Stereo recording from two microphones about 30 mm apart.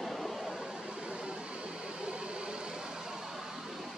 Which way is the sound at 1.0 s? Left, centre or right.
Right.